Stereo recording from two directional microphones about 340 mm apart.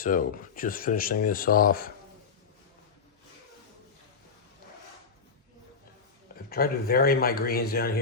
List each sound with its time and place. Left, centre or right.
0.0 s speech: left
6.5 s speech: left